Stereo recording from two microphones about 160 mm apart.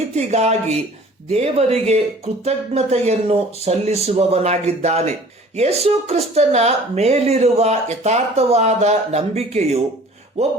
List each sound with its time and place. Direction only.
0.2 s a woman's voice: 45° right (ahead or behind)